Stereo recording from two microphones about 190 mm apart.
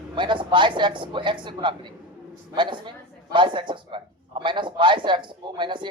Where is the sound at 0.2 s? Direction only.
25° right (ahead or behind).